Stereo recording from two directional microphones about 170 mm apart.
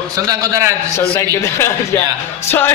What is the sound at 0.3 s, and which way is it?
Speech, 20° right (ahead or behind).